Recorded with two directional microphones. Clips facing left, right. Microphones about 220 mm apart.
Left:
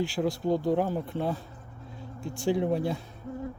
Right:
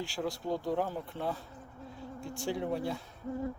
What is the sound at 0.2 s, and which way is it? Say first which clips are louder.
Speech: left 6 dB; 20° left (ahead or behind).